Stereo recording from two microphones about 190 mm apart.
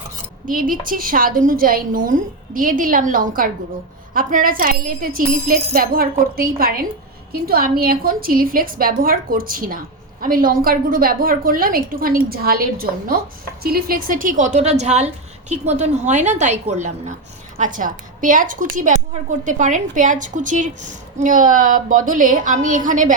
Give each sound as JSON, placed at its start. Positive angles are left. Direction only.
{"t": 0.4, "sound": "a woman's voice", "side_deg": -45}